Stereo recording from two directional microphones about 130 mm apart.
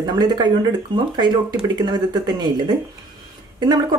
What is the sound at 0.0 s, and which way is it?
Speech, 30° right (ahead or behind).